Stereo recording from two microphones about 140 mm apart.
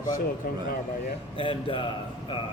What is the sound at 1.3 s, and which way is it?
Speech, 35° left (ahead or behind).